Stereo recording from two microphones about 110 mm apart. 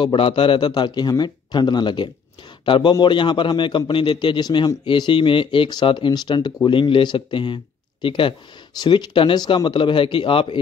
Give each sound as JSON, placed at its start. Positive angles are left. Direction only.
{"t": 0.0, "sound": "a man's voice", "side_deg": 50}
{"t": 8.7, "sound": "a man's voice", "side_deg": 40}